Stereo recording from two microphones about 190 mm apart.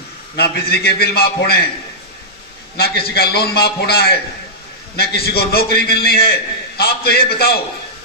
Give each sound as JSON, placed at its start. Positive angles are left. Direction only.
{"t": 0.3, "sound": "a man's voice", "side_deg": 55}
{"t": 2.7, "sound": "a man's voice", "side_deg": 55}